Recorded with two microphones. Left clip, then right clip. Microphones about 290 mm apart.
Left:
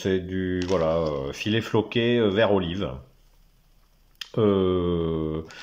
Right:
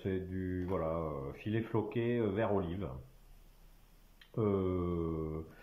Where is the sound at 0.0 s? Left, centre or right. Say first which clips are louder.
Left 13 dB; left.